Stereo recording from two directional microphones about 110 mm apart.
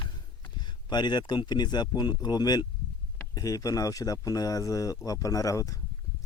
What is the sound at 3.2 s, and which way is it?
Speech, 35° left (ahead or behind).